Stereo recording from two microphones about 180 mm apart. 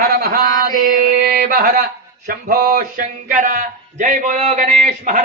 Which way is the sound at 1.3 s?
55° right (ahead or behind).